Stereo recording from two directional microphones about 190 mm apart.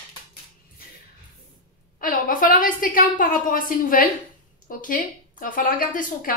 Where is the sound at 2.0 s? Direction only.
45° left (ahead or behind).